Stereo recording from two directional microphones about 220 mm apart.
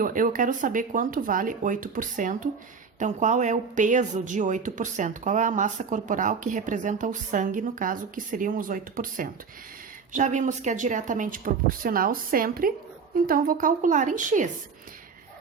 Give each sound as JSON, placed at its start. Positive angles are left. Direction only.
{"t": 0.0, "sound": "speech", "side_deg": -40}